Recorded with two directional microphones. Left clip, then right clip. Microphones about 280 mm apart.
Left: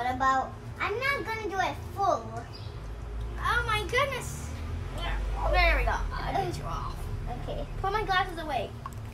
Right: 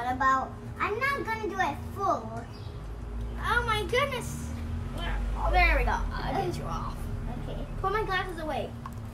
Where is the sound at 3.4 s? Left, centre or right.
Centre.